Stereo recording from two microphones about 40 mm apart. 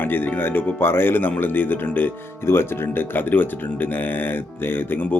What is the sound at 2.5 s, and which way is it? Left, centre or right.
Speech, left.